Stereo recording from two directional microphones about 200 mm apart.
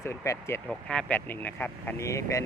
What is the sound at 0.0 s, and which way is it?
Speech, 15° left (ahead or behind).